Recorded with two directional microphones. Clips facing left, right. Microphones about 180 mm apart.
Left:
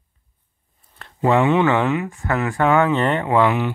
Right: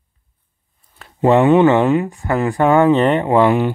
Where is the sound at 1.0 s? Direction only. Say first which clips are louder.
Right 1 dB; centre (ahead or behind).